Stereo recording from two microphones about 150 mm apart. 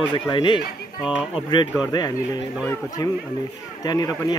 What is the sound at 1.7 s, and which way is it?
Speech, 25° left (ahead or behind).